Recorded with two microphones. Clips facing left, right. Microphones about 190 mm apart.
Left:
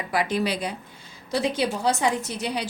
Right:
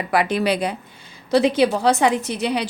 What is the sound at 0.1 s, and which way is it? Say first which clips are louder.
A woman's voice: right 5 dB; 65° right (ahead or behind).